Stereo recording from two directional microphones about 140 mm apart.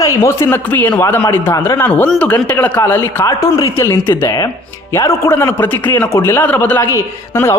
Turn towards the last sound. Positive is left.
turn(degrees=20)  # may be behind; listen again after turning